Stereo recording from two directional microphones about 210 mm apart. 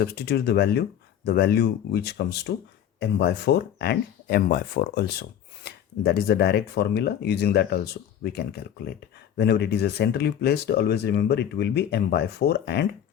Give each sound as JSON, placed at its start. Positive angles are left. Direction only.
{"t": 0.0, "sound": "speech", "side_deg": 50}